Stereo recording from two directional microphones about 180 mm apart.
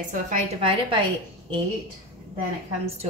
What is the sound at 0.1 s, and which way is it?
Speech, 40° right (ahead or behind).